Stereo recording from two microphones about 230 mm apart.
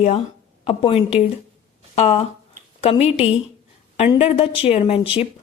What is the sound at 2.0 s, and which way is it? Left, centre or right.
Speech, left.